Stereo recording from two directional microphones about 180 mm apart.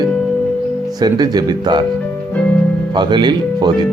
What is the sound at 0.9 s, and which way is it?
Speech, 20° right (ahead or behind).